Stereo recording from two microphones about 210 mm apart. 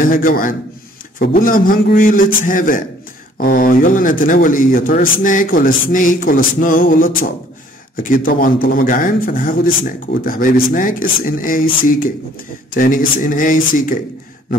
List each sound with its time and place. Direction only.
0.0 s a man's voice: 40° left (ahead or behind)